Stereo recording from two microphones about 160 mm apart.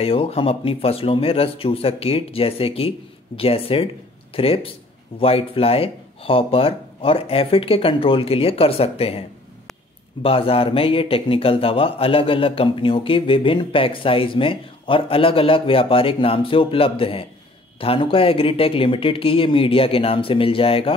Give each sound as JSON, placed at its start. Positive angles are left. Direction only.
{"t": 0.0, "sound": "a man's voice", "side_deg": 35}
{"t": 10.2, "sound": "a man's voice", "side_deg": 35}